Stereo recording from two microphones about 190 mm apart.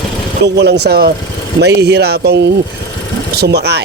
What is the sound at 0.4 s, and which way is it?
Speech, 65° right (ahead or behind).